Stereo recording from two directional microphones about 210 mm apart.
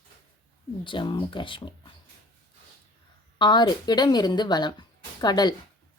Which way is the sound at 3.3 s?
20° left (ahead or behind).